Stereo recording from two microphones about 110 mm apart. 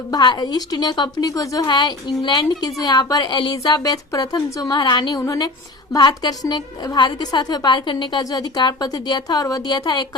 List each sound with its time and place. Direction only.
0.1 s a woman's voice: 40° left (ahead or behind)
5.2 s a woman's voice: 30° left (ahead or behind)